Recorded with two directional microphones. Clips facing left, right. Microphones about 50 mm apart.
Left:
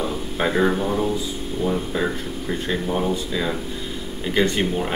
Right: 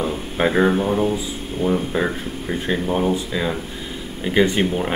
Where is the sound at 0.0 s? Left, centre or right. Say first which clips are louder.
Right 3 dB; right.